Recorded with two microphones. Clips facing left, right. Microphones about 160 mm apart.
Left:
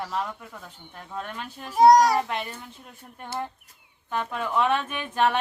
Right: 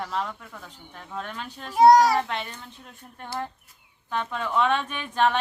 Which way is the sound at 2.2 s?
10° left (ahead or behind).